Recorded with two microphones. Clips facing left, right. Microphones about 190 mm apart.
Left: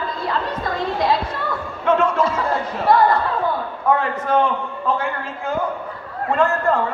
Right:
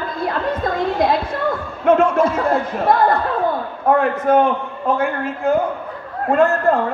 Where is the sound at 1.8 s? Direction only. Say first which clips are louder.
Right 4 dB; 55° right (ahead or behind).